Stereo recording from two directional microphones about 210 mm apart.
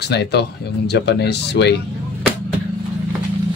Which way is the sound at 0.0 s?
50° left (ahead or behind).